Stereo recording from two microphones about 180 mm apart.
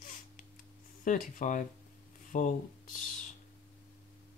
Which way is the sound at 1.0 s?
45° left (ahead or behind).